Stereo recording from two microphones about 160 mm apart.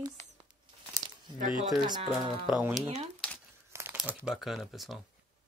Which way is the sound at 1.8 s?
25° right (ahead or behind).